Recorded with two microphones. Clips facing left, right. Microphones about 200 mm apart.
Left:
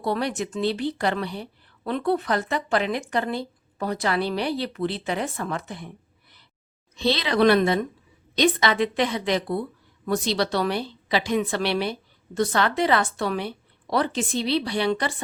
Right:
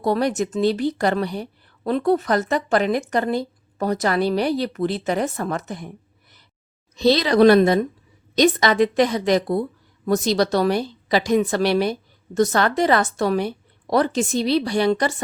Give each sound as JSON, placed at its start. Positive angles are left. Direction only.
{"t": 0.0, "sound": "speech", "side_deg": -45}
{"t": 6.9, "sound": "a woman's voice", "side_deg": -40}